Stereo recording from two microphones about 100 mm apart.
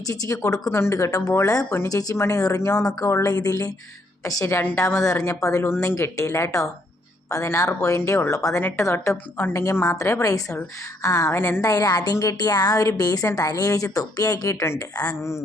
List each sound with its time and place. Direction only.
0.1 s a woman's voice: 35° left (ahead or behind)